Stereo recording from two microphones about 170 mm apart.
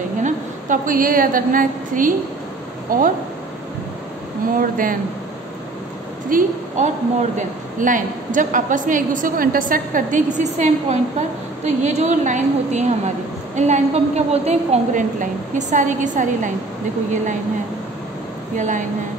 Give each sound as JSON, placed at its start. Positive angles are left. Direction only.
{"t": 0.2, "sound": "a woman's voice", "side_deg": -50}
{"t": 4.6, "sound": "a woman's voice", "side_deg": -55}
{"t": 6.3, "sound": "a woman's voice", "side_deg": -55}
{"t": 18.6, "sound": "a woman's voice", "side_deg": -45}